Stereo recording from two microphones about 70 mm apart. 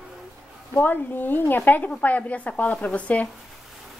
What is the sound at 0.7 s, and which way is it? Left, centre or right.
Speech, left.